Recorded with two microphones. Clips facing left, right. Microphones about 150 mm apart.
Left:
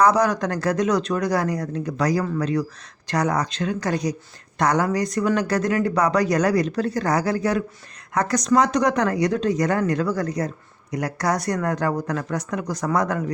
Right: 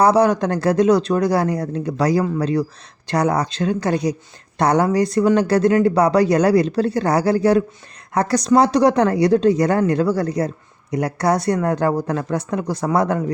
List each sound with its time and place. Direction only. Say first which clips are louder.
0.0 s speech: right 4 dB; 30° right (ahead or behind)